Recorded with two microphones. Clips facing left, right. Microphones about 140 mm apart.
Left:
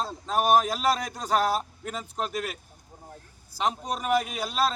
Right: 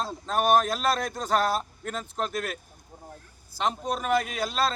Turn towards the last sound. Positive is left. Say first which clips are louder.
# even
turn(degrees=10)  # may be behind; listen again after turning